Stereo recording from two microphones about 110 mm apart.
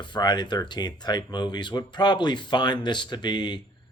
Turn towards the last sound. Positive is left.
turn(degrees=45)  # may be behind; listen again after turning